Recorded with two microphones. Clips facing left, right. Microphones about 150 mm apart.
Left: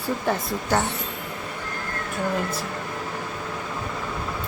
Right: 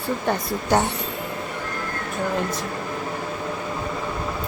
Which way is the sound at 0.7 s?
15° right (ahead or behind).